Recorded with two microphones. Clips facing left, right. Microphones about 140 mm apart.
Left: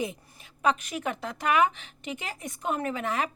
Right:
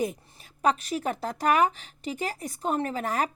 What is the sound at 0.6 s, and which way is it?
A woman's voice, 35° right (ahead or behind).